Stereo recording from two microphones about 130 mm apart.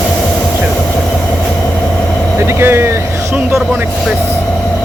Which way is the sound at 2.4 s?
20° right (ahead or behind).